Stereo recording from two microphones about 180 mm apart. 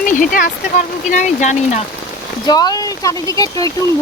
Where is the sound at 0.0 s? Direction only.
50° left (ahead or behind).